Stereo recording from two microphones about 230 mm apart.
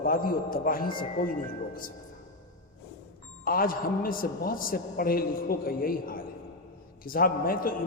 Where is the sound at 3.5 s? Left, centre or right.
Left.